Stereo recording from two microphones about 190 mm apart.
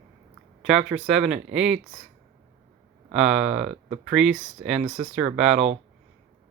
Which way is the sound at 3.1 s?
5° right (ahead or behind).